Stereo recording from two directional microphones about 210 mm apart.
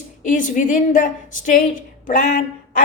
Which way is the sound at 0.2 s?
40° left (ahead or behind).